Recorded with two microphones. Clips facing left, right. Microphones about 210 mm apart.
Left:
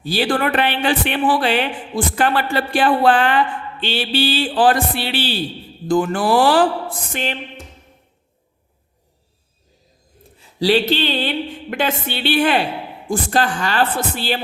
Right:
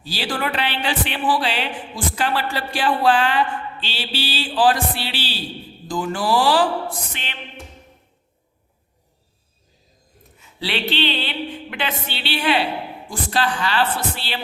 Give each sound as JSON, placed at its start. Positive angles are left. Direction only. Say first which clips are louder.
{"t": 0.0, "sound": "speech", "louder": "left 7 dB", "side_deg": 55}
{"t": 7.1, "sound": "speech", "louder": "left 12 dB", "side_deg": 45}
{"t": 10.3, "sound": "speech", "louder": "left 11 dB", "side_deg": 35}